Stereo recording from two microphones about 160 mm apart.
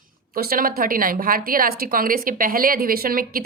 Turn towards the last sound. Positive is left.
turn(degrees=-65)  # may be behind; listen again after turning